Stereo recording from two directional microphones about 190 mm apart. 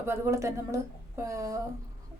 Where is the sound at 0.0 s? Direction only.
15° right (ahead or behind).